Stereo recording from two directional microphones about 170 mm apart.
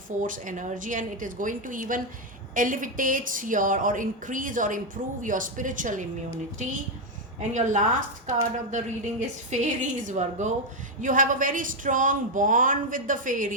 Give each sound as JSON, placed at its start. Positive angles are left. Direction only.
{"t": 0.2, "sound": "speech", "side_deg": -50}